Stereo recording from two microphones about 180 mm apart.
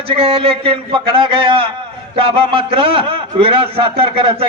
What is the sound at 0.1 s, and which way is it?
A man's voice, 30° right (ahead or behind).